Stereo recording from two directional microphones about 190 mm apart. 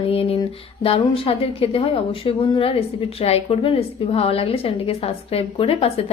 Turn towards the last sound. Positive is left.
turn(degrees=30)  # may be behind; listen again after turning